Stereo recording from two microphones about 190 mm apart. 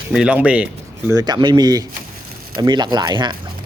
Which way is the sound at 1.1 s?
20° right (ahead or behind).